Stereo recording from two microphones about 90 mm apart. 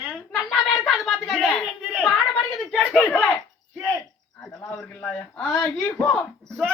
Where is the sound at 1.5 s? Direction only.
10° left (ahead or behind).